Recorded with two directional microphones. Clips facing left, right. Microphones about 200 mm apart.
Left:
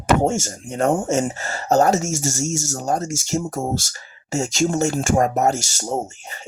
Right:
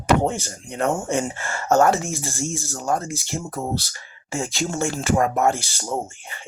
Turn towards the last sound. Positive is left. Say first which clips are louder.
# left 1 dB
turn(degrees=45)  # may be behind; listen again after turning